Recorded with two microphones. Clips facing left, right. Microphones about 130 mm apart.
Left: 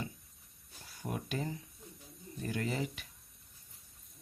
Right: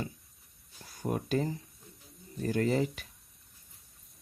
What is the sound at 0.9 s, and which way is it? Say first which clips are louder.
Speech: right 7 dB; 40° right (ahead or behind).